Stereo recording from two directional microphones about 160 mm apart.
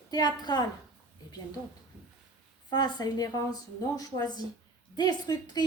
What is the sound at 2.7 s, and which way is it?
A woman's voice, 25° left (ahead or behind).